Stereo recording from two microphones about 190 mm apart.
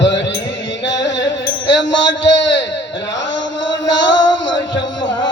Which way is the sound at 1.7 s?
70° left (ahead or behind).